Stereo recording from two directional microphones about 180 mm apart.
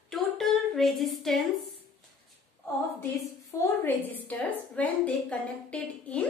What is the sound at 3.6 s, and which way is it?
A woman's voice, 10° left (ahead or behind).